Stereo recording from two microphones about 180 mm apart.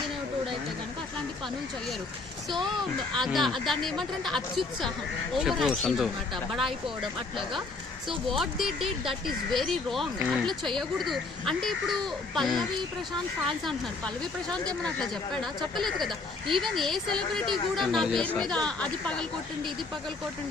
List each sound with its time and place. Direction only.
2.6 s speech: centre (ahead or behind)
14.5 s speech: 5° left (ahead or behind)